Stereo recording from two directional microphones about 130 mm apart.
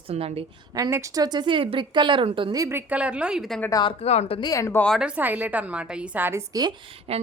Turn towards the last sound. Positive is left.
turn(degrees=-50)  # may be behind; listen again after turning